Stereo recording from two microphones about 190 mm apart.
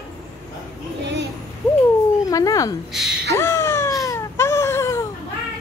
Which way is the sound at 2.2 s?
20° left (ahead or behind).